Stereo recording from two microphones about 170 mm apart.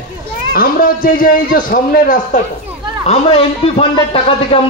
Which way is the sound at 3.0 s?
35° left (ahead or behind).